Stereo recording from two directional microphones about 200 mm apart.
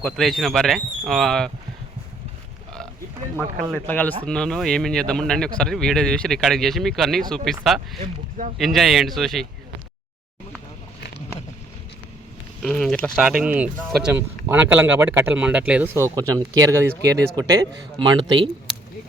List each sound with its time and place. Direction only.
0.0 s a man's voice: centre (ahead or behind)
3.6 s a man's voice: 5° left (ahead or behind)
8.0 s speech: 35° right (ahead or behind)
8.5 s a man's voice: centre (ahead or behind)
12.6 s a man's voice: 5° left (ahead or behind); by 18.3 s 20° right (ahead or behind)